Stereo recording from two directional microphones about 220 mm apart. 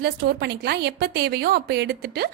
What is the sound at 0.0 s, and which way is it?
A woman's voice, 45° right (ahead or behind).